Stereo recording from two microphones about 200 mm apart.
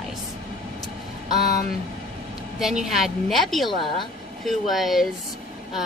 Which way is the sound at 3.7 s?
25° left (ahead or behind).